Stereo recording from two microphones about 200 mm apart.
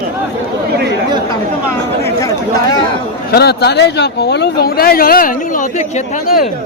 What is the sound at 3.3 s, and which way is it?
Speech, 55° left (ahead or behind).